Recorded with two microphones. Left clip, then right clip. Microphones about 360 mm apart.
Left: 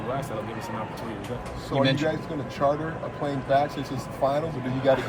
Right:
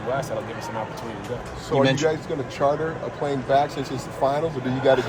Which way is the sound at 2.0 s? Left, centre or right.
Right.